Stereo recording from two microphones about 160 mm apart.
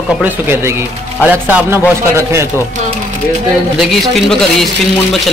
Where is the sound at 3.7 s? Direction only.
Centre (ahead or behind).